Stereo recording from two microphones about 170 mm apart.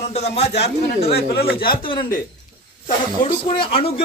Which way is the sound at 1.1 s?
65° left (ahead or behind).